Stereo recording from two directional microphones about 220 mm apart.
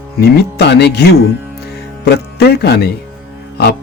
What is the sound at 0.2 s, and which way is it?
Speech, 50° left (ahead or behind).